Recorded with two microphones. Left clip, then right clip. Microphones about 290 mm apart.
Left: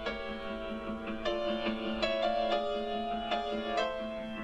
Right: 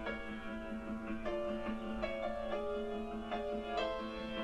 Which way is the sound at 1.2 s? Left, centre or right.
Left.